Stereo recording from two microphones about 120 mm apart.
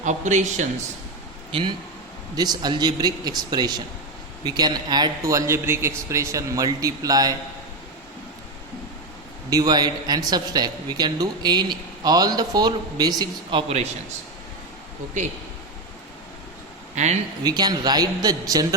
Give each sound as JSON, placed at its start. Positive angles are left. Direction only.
{"t": 0.0, "sound": "speech", "side_deg": -85}
{"t": 2.3, "sound": "a man's voice", "side_deg": -35}
{"t": 9.5, "sound": "a man's voice", "side_deg": -35}
{"t": 16.9, "sound": "speech", "side_deg": -75}
{"t": 17.4, "sound": "a man's voice", "side_deg": -35}